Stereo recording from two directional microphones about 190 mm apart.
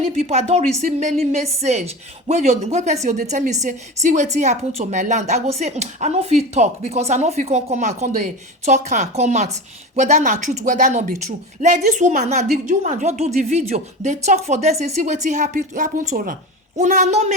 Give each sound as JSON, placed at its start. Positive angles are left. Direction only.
{"t": 0.3, "sound": "a woman's voice", "side_deg": -35}